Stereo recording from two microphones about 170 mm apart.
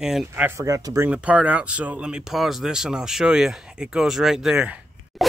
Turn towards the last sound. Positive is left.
turn(degrees=-5)  # may be behind; listen again after turning